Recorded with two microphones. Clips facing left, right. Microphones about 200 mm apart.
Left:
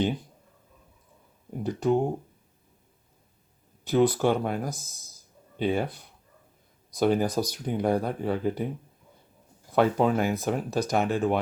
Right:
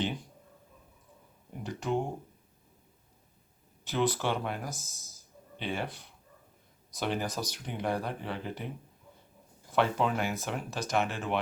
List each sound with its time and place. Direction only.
1.6 s speech: 35° left (ahead or behind)
3.9 s speech: 45° left (ahead or behind)
4.7 s speech: 15° left (ahead or behind)
5.5 s speech: 40° left (ahead or behind)
7.0 s speech: 40° left (ahead or behind)
9.7 s speech: 45° left (ahead or behind)